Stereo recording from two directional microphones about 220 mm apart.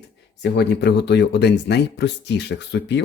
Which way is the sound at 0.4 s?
50° left (ahead or behind).